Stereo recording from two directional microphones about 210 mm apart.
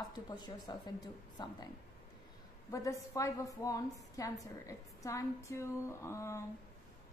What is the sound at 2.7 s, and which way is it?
A woman's voice, 15° left (ahead or behind).